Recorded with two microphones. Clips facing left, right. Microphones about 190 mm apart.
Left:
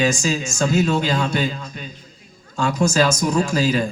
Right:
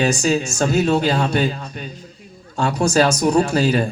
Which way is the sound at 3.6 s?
55° right (ahead or behind).